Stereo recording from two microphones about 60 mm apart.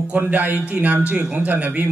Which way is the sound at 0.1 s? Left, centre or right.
Right.